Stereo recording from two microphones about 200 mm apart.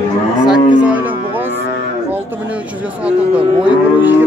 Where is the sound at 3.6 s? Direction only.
10° right (ahead or behind).